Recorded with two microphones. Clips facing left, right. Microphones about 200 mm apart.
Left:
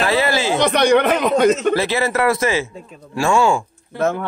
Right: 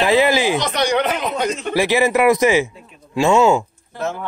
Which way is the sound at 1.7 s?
15° right (ahead or behind).